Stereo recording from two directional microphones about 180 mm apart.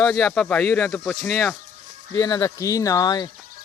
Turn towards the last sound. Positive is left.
turn(degrees=20)  # may be behind; listen again after turning